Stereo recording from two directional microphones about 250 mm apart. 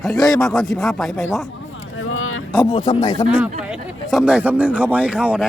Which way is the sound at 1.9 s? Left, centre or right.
Left.